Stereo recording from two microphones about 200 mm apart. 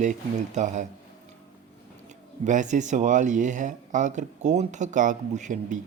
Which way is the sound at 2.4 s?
40° right (ahead or behind).